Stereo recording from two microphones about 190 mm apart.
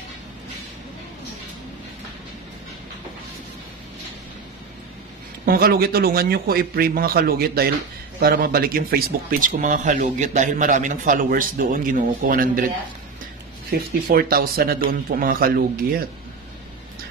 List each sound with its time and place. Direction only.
5.4 s speech: 50° right (ahead or behind)
13.7 s speech: 55° right (ahead or behind)